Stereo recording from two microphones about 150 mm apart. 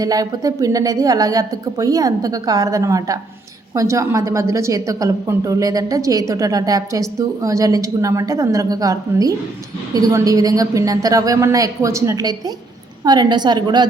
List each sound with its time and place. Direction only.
0.0 s a woman's voice: 25° right (ahead or behind)